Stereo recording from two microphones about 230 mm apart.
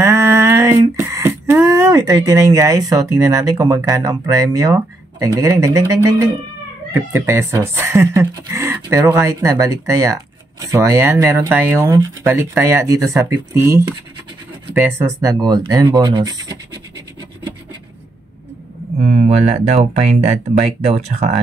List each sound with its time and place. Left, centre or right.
0.0 s female singing: centre
6.9 s speech: centre
19.0 s speech: right